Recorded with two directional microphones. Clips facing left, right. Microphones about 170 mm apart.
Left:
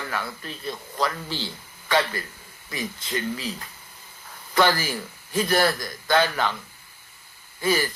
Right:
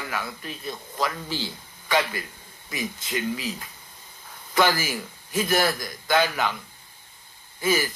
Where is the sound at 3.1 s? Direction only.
15° right (ahead or behind).